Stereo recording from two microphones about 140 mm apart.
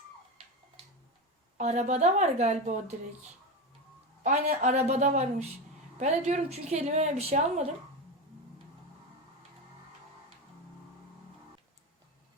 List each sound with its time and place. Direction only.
0.4 s tick-tock: 40° right (ahead or behind)
1.5 s a woman's voice: 55° right (ahead or behind)
4.2 s a woman's voice: 60° right (ahead or behind)